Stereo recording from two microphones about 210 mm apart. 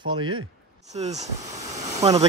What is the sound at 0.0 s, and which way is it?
Speech, 70° right (ahead or behind).